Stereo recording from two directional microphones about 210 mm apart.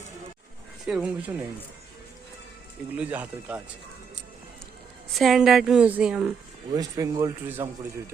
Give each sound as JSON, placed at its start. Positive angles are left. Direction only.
{"t": 0.9, "sound": "a woman's voice", "side_deg": -5}
{"t": 2.9, "sound": "a man's voice", "side_deg": -5}
{"t": 5.1, "sound": "a woman's voice", "side_deg": 0}
{"t": 6.7, "sound": "a man's voice", "side_deg": -15}